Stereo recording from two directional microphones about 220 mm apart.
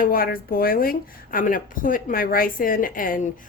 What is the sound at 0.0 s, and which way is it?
Speech, 40° left (ahead or behind).